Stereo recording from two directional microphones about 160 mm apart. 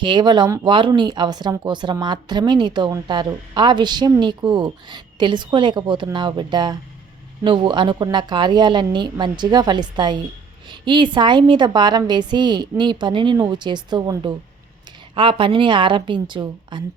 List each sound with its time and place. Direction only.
0.0 s a woman's voice: 30° right (ahead or behind)